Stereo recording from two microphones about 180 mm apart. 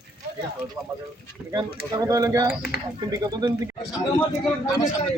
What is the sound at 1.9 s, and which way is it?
Speech, 20° right (ahead or behind).